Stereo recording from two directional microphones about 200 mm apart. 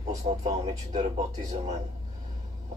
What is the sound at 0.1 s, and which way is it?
Speech, 35° right (ahead or behind).